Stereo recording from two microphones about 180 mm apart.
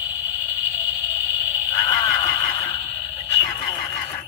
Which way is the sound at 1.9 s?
20° left (ahead or behind).